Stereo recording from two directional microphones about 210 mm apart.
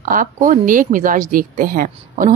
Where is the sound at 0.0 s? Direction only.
40° right (ahead or behind).